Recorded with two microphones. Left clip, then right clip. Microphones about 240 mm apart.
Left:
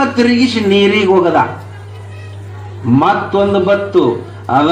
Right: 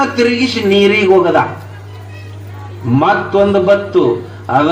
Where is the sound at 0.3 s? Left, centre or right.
Left.